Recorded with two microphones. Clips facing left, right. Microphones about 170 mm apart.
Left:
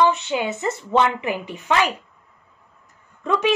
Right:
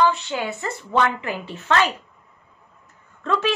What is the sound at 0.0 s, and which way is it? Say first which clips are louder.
A child's voice: left 2 dB; 20° left (ahead or behind).